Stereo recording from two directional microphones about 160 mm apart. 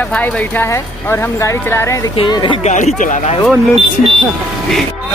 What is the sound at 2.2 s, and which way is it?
Speech, 30° left (ahead or behind).